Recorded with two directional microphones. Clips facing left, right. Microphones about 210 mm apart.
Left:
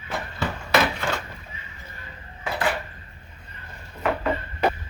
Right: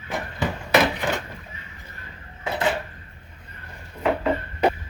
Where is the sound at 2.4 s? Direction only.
25° right (ahead or behind).